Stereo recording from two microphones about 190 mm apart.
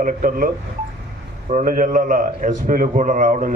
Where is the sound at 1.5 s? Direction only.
45° right (ahead or behind).